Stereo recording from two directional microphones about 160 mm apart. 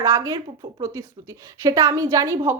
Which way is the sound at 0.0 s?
20° right (ahead or behind).